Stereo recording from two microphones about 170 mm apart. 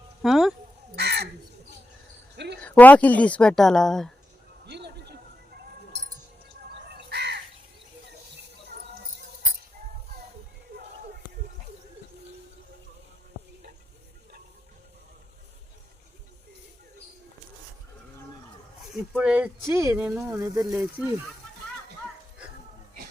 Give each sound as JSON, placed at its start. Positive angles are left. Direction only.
{"t": 0.2, "sound": "a sound", "side_deg": 0}
{"t": 0.9, "sound": "crow", "side_deg": -75}
{"t": 2.3, "sound": "cricket", "side_deg": -80}
{"t": 2.6, "sound": "a woman's voice", "side_deg": 10}
{"t": 4.6, "sound": "a sound", "side_deg": -80}
{"t": 6.8, "sound": "crow", "side_deg": -75}
{"t": 18.9, "sound": "speech", "side_deg": -5}